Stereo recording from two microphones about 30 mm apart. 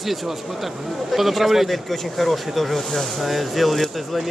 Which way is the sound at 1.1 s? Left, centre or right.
Centre.